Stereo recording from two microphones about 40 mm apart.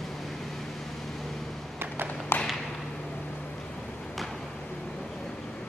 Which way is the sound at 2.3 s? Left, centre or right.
Left.